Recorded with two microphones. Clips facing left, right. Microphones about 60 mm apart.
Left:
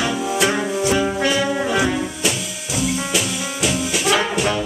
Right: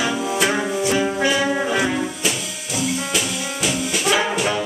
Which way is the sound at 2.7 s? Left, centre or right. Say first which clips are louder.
Left 1 dB; centre.